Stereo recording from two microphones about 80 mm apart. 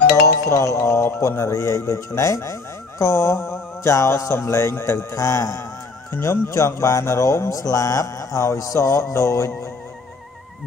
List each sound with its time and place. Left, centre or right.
0.1 s speech: left
6.1 s speech: left